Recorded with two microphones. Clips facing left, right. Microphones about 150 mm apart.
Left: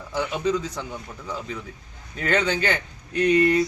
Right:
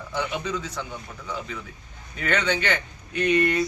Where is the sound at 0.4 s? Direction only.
35° left (ahead or behind).